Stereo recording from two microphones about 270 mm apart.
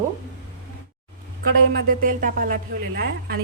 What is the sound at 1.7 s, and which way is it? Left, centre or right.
Speech, right.